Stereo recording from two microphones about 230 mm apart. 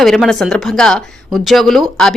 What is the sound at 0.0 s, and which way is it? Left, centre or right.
Speech, centre.